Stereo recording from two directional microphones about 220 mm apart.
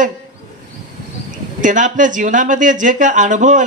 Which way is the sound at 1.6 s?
35° right (ahead or behind).